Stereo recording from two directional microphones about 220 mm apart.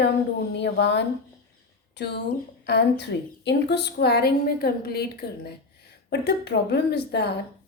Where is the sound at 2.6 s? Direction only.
50° left (ahead or behind).